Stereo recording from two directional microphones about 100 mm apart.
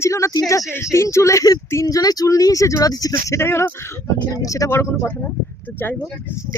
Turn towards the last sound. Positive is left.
turn(degrees=20)  # may be behind; listen again after turning